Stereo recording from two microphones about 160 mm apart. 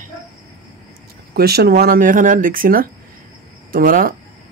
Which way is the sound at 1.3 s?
80° right.